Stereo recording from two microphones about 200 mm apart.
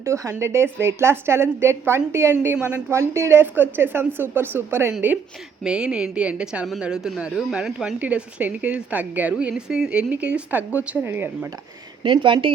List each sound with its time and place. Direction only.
0.0 s a woman's voice: 15° right (ahead or behind)
12.0 s speech: 25° right (ahead or behind)